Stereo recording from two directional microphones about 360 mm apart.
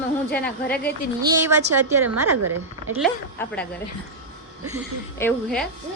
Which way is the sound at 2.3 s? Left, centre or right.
Right.